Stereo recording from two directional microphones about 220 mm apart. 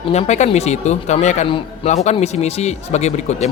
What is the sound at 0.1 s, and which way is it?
Speech, 30° left (ahead or behind).